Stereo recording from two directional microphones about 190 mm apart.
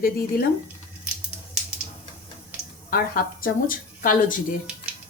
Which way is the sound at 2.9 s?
50° left (ahead or behind).